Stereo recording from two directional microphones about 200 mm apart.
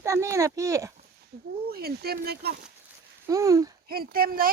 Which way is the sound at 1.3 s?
55° right (ahead or behind).